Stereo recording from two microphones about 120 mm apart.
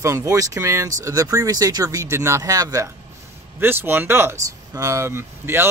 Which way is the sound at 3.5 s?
15° right (ahead or behind).